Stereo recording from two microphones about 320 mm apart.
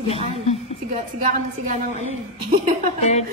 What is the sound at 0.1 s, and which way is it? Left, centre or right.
Speech, centre.